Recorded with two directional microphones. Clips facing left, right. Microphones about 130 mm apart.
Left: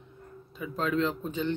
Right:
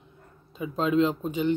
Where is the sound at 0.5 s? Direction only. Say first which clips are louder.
Right 5 dB; 20° right (ahead or behind).